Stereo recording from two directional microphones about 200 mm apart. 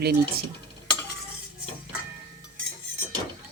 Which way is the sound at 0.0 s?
50° right (ahead or behind).